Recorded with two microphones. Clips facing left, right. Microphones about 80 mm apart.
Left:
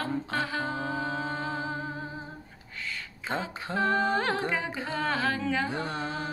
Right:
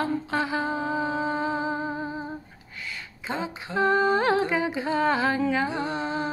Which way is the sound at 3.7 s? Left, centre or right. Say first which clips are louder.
Right 4 dB; centre.